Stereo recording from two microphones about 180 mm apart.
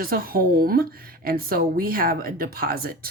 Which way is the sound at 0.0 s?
55° right (ahead or behind).